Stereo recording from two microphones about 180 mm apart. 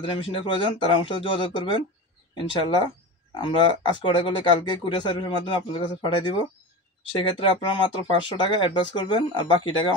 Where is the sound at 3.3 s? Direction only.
25° left (ahead or behind).